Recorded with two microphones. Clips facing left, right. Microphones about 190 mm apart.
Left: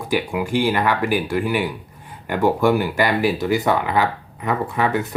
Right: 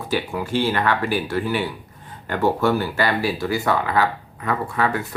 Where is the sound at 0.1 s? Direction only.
15° left (ahead or behind).